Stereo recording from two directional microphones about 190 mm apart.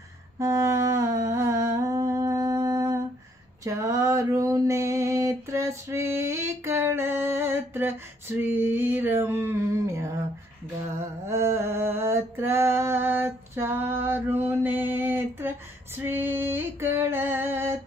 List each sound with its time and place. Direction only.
0.4 s humming: 15° right (ahead or behind)
3.6 s a sound: 15° right (ahead or behind)
16.0 s music: 10° right (ahead or behind)